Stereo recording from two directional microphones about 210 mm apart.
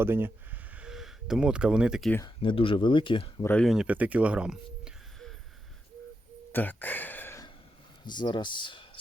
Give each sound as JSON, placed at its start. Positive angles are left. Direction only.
{"t": 0.0, "sound": "speech", "side_deg": -10}
{"t": 2.1, "sound": "speech", "side_deg": 20}
{"t": 3.4, "sound": "speech", "side_deg": 5}
{"t": 6.5, "sound": "a sound", "side_deg": 10}
{"t": 8.0, "sound": "speech", "side_deg": 20}